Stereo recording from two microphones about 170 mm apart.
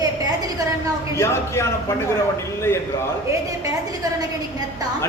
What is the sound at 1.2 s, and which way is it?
Speech, 15° left (ahead or behind).